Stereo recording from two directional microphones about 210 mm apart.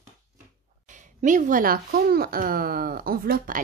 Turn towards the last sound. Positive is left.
turn(degrees=-40)  # may be behind; listen again after turning